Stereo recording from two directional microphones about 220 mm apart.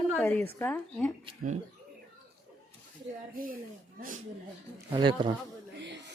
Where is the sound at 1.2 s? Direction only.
30° right (ahead or behind).